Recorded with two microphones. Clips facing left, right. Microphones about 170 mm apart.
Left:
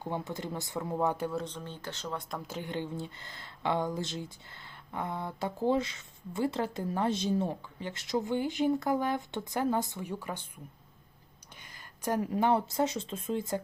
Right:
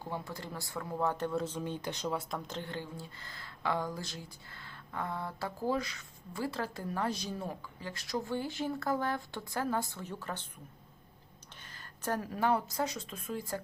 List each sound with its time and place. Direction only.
0.0 s speech: 20° left (ahead or behind)
1.5 s speech: 10° right (ahead or behind)
2.5 s speech: 15° left (ahead or behind)
11.6 s speech: 15° left (ahead or behind)